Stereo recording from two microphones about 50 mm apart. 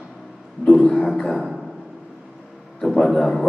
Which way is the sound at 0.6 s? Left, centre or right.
Centre.